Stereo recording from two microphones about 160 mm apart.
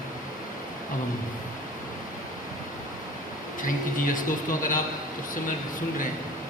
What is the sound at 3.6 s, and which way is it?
Speech, 55° left (ahead or behind).